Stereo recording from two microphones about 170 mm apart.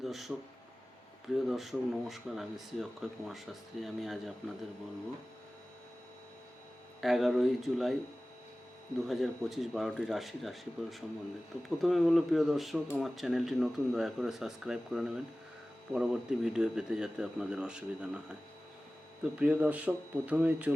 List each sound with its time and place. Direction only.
0.0 s speech: centre (ahead or behind)
7.0 s speech: centre (ahead or behind)
9.0 s speech: centre (ahead or behind)
19.4 s speech: 10° right (ahead or behind)